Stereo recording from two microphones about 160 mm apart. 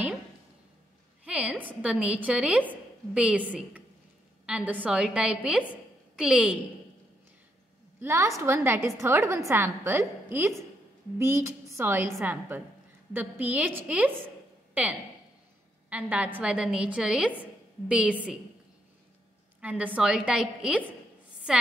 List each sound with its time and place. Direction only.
1.2 s a woman's voice: 5° right (ahead or behind)
8.0 s a woman's voice: 15° right (ahead or behind)
14.7 s a sound: 10° right (ahead or behind)
15.9 s a woman's voice: 10° right (ahead or behind)
19.6 s a woman's voice: 10° right (ahead or behind)